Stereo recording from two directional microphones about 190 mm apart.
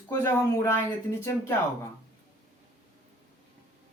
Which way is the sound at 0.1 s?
15° left (ahead or behind).